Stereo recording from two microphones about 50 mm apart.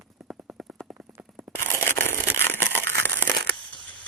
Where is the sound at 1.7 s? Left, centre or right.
Left.